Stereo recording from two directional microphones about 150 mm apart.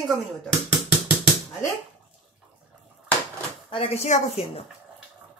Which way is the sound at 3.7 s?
40° left (ahead or behind).